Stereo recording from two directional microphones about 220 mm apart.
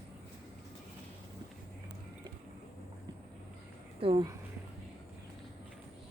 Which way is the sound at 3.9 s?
25° right (ahead or behind).